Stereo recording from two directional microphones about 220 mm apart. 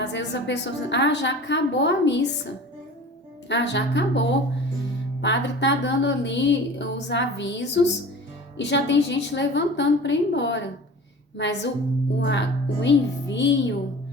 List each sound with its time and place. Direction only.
0.0 s a woman's voice: 55° left (ahead or behind)
3.5 s a woman's voice: 50° left (ahead or behind)